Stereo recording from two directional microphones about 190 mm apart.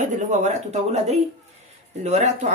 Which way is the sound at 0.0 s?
40° right (ahead or behind).